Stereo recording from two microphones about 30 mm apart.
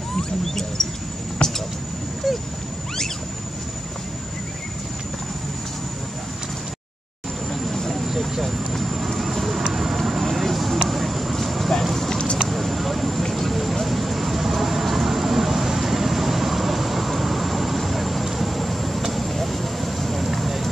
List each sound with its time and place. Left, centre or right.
0.2 s a sound: centre
1.4 s speech: left
2.2 s speech: centre
7.6 s vehicle: centre
7.9 s vehicle: centre
11.3 s clip-clop: centre
12.4 s vehicle: centre
13.3 s a sound: centre
13.8 s vehicle: centre